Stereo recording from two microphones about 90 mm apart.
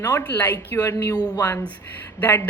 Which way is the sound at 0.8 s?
45° left (ahead or behind).